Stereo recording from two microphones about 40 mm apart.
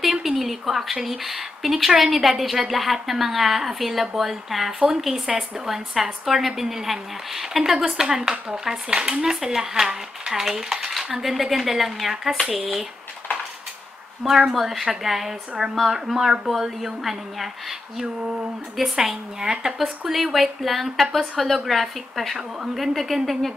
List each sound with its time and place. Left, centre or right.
0.0 s a sound: centre
0.4 s a woman's voice: centre
14.2 s a woman's voice: centre